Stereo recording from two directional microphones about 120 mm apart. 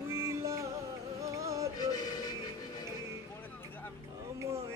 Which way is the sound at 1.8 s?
30° left (ahead or behind).